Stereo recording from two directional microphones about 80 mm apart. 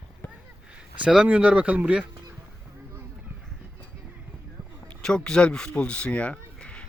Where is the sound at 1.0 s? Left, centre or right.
Centre.